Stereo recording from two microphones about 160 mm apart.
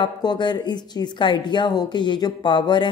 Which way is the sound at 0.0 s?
30° left (ahead or behind).